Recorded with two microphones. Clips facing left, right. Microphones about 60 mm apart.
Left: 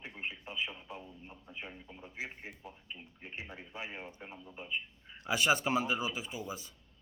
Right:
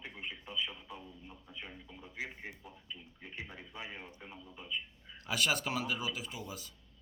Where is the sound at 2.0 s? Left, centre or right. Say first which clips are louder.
Right 1 dB; left.